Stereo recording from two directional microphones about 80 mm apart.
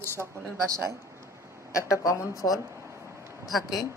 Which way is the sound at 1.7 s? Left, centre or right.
Left.